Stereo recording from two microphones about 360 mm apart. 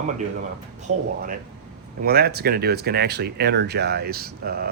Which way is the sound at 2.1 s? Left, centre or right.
Right.